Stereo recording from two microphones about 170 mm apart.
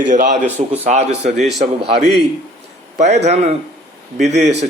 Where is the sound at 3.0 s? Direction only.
40° right (ahead or behind).